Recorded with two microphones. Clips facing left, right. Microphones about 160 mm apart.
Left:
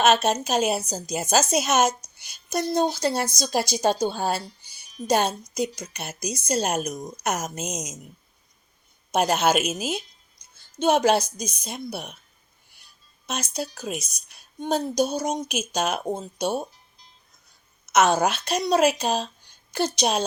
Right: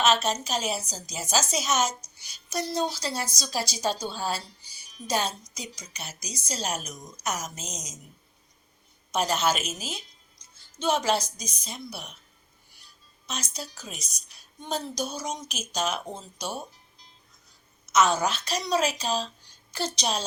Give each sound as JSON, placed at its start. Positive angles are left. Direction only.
{"t": 0.0, "sound": "a woman's voice", "side_deg": 55}
{"t": 9.1, "sound": "a woman's voice", "side_deg": 55}
{"t": 13.2, "sound": "a woman's voice", "side_deg": 55}
{"t": 17.9, "sound": "a woman's voice", "side_deg": 60}